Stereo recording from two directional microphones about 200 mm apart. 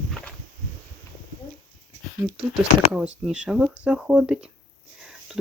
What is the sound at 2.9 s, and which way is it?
Speech, 5° right (ahead or behind).